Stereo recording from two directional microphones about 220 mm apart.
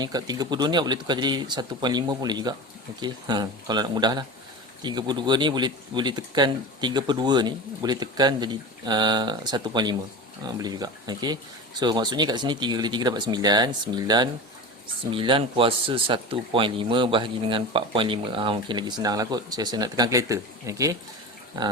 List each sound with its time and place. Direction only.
0.0 s speech: 20° right (ahead or behind)